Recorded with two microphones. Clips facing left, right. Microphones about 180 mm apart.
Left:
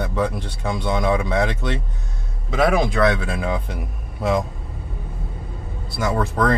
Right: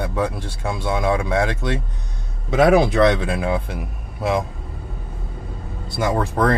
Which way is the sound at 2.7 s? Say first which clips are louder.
Right 4 dB; 30° right (ahead or behind).